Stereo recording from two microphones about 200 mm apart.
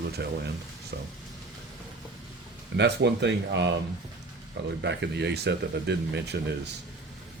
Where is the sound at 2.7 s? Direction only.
60° right (ahead or behind).